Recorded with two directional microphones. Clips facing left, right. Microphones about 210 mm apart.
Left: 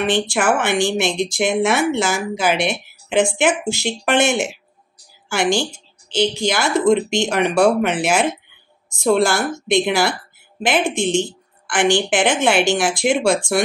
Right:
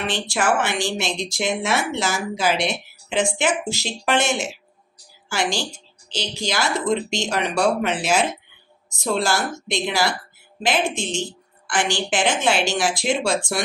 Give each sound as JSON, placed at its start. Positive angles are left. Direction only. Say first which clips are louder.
{"t": 0.0, "sound": "speech", "louder": "left 5 dB", "side_deg": 55}